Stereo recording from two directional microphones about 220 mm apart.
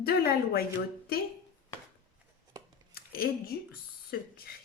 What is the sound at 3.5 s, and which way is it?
Speech, 50° left (ahead or behind).